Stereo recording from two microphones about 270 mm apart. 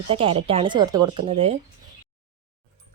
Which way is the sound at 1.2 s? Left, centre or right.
Right.